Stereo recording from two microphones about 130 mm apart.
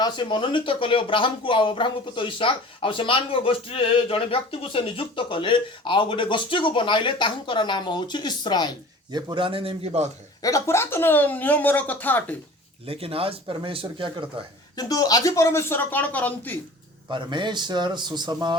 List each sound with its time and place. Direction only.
0.0 s speech: 35° left (ahead or behind)
9.1 s a man's voice: 40° right (ahead or behind)
10.4 s speech: 25° left (ahead or behind)
12.8 s a man's voice: 45° right (ahead or behind)
14.8 s speech: 30° left (ahead or behind); by 16.6 s 15° left (ahead or behind)
17.1 s a man's voice: 35° right (ahead or behind)